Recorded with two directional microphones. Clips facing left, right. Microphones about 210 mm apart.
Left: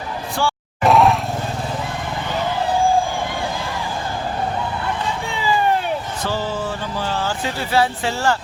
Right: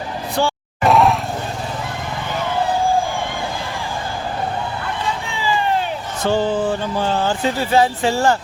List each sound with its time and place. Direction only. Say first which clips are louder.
0.9 s vehicle: even; centre (ahead or behind)
7.3 s speech: right 5 dB; 20° right (ahead or behind)